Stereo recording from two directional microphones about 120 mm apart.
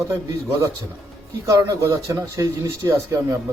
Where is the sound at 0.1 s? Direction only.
25° right (ahead or behind).